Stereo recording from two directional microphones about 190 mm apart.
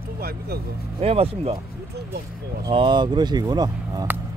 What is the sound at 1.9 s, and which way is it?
Speech, 60° right (ahead or behind).